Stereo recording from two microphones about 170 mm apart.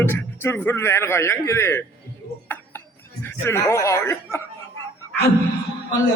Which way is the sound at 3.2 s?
15° left (ahead or behind).